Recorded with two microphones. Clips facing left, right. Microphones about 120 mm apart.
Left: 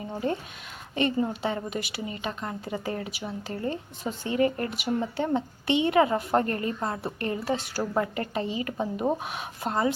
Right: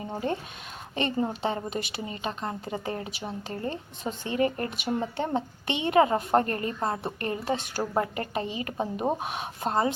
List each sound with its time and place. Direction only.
0.1 s speech: 30° right (ahead or behind)